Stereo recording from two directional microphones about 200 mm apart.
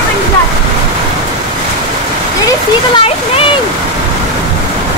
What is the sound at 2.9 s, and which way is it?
Waterfall, 25° left (ahead or behind).